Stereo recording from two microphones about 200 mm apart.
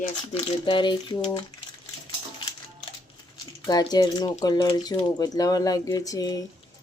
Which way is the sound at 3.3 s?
20° left (ahead or behind).